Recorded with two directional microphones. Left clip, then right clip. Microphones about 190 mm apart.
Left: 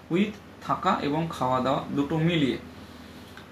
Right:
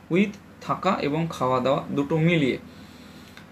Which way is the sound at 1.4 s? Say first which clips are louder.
Right 3 dB; 15° right (ahead or behind).